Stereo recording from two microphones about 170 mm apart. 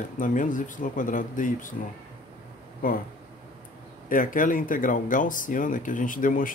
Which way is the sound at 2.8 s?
55° left (ahead or behind).